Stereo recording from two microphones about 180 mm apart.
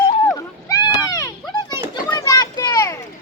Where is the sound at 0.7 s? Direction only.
20° left (ahead or behind).